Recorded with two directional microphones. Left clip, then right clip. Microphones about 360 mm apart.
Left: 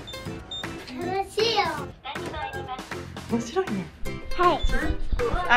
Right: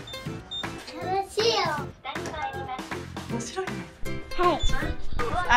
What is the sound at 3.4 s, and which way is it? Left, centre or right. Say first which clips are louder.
Music: left 5 dB; centre.